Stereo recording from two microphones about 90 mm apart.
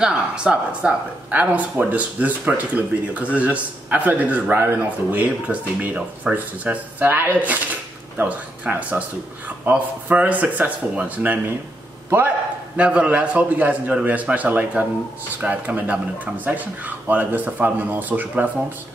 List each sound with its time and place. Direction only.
0.0 s speech: 10° right (ahead or behind)
12.7 s speech: 15° right (ahead or behind)